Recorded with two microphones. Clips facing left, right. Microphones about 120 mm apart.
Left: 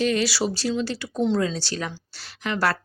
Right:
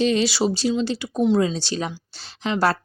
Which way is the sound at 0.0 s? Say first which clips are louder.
Right 3 dB; 20° right (ahead or behind).